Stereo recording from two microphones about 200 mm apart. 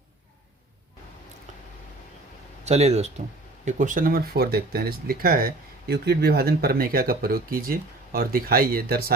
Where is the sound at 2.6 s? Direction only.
35° right (ahead or behind).